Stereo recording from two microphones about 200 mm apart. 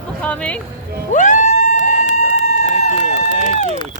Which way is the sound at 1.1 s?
40° left (ahead or behind).